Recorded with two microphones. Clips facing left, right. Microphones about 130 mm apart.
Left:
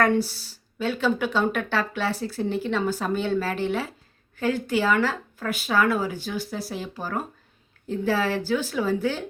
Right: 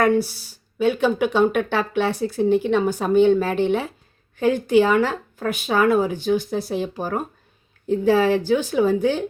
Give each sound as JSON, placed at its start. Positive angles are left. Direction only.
{"t": 0.0, "sound": "speech", "side_deg": -15}